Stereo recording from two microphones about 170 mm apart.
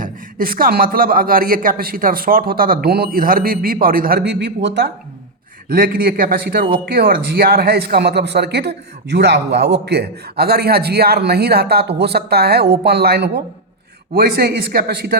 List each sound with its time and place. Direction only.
0.0 s a man's voice: 55° right (ahead or behind); by 4.9 s 80° right
5.6 s a man's voice: 60° right (ahead or behind)
14.1 s a man's voice: 60° right (ahead or behind)